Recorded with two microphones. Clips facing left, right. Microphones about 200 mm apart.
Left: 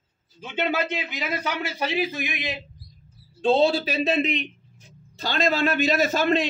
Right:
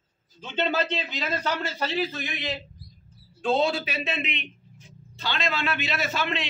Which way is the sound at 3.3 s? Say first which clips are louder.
Left 4 dB; 30° left (ahead or behind).